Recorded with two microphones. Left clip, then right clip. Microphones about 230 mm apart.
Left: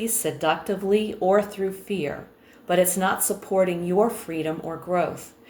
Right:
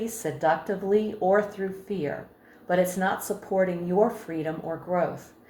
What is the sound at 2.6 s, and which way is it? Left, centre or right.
Speech, left.